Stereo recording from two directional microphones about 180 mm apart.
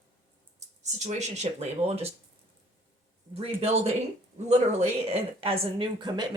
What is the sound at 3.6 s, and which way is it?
A woman's voice, 35° right (ahead or behind).